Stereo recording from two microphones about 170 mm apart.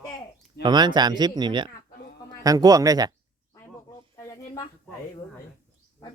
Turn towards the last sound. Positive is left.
turn(degrees=20)  # may be behind; listen again after turning